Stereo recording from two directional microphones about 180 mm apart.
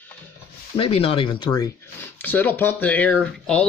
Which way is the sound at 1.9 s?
10° left (ahead or behind).